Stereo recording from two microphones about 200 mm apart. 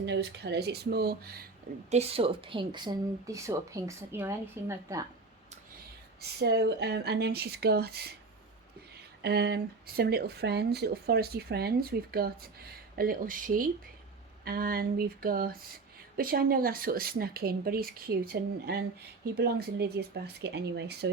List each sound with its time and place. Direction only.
0.0 s speech: 60° right (ahead or behind)
1.9 s a woman's voice: 30° right (ahead or behind); by 5.0 s 15° right (ahead or behind)
6.4 s speech: 55° right (ahead or behind)
9.2 s speech: 55° right (ahead or behind)